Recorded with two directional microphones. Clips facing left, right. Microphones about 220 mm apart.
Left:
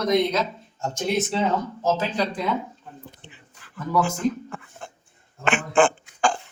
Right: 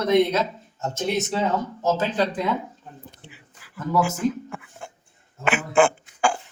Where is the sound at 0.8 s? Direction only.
Centre (ahead or behind).